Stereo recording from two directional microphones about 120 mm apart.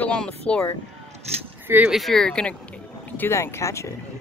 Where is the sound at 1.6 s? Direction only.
15° right (ahead or behind).